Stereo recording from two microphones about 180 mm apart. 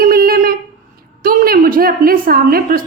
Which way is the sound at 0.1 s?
55° right (ahead or behind).